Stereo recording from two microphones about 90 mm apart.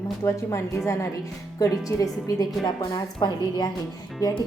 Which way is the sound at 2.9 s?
50° left (ahead or behind).